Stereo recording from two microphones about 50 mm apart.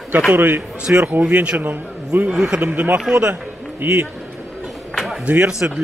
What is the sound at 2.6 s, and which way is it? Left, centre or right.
Speech, right.